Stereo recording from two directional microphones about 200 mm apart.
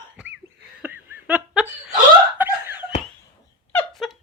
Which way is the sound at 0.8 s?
5° right (ahead or behind).